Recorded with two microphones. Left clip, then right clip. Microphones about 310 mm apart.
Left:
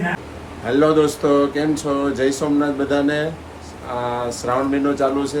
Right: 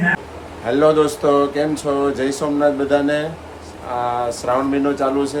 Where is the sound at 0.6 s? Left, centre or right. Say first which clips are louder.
Right 1 dB; centre.